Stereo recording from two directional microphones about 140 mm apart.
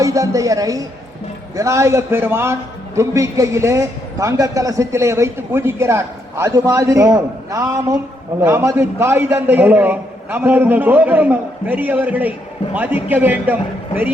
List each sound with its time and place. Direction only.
0.0 s a man's voice: 25° right (ahead or behind)